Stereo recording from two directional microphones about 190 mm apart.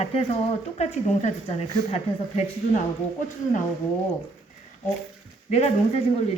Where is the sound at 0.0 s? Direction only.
35° left (ahead or behind).